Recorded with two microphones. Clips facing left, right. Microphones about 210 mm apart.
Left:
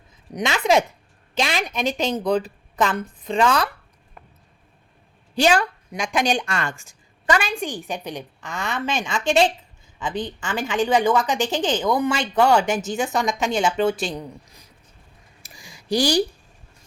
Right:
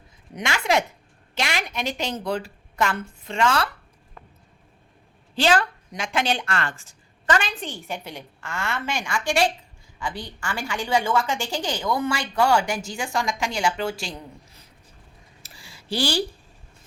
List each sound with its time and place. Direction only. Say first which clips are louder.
0.3 s a woman's voice: left 4 dB; 20° left (ahead or behind)
5.3 s a woman's voice: left 2 dB; 15° left (ahead or behind)
15.4 s a sound: left 6 dB; 15° left (ahead or behind)